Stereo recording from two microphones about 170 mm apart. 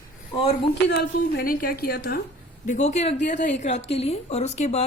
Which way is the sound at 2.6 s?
45° left (ahead or behind).